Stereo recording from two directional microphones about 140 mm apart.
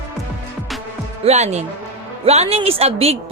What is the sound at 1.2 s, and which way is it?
A woman's voice, 50° right (ahead or behind).